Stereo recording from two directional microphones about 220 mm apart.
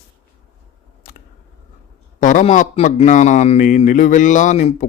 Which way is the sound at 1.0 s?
40° left (ahead or behind).